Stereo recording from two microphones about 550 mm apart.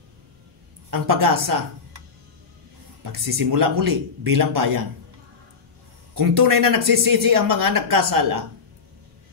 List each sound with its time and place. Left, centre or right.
0.8 s speech: right
6.1 s speech: right